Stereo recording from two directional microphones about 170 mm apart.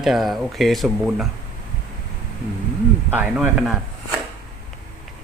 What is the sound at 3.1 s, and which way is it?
Speech, 10° right (ahead or behind).